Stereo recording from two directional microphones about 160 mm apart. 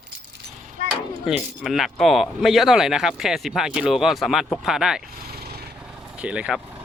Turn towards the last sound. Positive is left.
turn(degrees=-5)  # may be behind; listen again after turning